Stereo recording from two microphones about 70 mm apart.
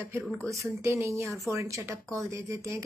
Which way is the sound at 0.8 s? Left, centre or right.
Right.